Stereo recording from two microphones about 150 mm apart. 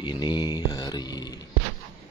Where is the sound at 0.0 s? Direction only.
30° left (ahead or behind).